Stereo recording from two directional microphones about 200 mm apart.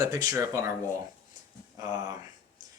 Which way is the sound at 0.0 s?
15° right (ahead or behind).